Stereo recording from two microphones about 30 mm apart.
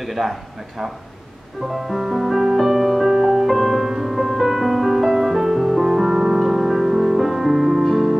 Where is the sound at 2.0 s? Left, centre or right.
Centre.